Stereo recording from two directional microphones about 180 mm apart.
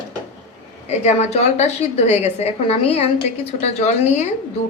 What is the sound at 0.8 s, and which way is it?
A woman's voice, 35° left (ahead or behind).